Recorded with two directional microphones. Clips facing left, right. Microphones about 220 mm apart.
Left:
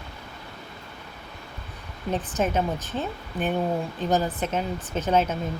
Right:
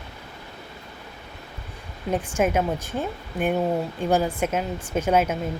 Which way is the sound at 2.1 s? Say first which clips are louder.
Right 3 dB; 10° right (ahead or behind).